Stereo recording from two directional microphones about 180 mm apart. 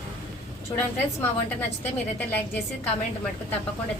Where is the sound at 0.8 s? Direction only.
10° left (ahead or behind).